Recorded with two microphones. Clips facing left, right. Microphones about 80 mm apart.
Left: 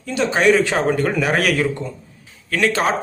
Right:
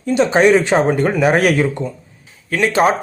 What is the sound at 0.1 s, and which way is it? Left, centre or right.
A man's voice, right.